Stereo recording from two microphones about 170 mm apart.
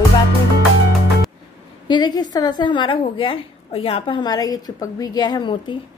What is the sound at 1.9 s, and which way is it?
A woman's voice, 25° left (ahead or behind).